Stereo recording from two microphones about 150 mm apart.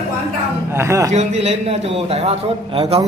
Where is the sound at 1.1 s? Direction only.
45° right (ahead or behind).